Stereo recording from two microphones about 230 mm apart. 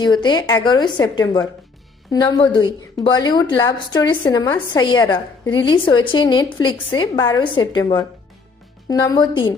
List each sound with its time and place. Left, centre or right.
0.0 s a woman's voice: centre